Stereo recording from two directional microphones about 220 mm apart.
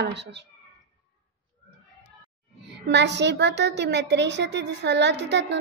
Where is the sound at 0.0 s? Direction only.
50° right (ahead or behind).